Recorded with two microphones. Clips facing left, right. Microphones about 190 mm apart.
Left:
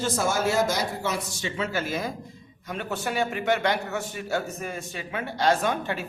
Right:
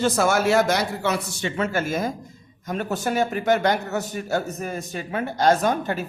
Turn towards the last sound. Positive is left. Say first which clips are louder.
# right 4 dB
turn(degrees=-40)  # may be behind; listen again after turning